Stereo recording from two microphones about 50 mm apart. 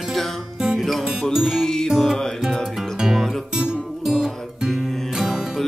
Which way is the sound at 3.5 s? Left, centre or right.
Centre.